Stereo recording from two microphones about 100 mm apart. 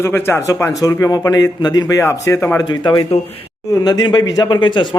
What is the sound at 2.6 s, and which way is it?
A man's voice, 45° left (ahead or behind).